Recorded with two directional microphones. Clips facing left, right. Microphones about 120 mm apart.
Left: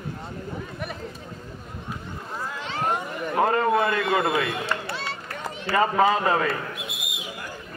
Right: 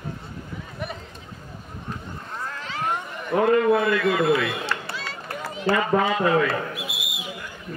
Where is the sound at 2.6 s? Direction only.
30° left (ahead or behind).